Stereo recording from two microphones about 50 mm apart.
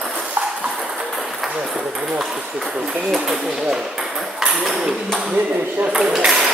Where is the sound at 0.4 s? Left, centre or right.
Right.